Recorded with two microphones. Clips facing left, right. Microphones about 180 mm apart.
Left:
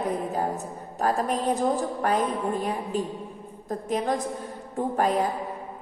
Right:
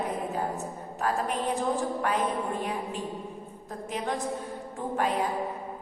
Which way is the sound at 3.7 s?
40° left (ahead or behind).